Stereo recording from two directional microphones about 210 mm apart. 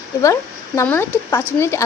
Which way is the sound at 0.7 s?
10° left (ahead or behind).